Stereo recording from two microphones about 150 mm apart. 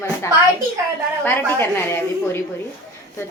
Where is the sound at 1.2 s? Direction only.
15° left (ahead or behind).